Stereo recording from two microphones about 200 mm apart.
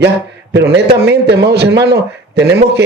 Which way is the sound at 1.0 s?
55° right (ahead or behind).